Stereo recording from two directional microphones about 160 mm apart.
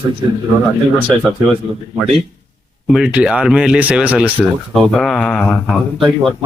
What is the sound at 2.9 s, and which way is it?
Speech, 5° right (ahead or behind).